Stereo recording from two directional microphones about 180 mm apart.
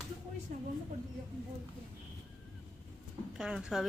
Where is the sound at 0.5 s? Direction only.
45° right (ahead or behind).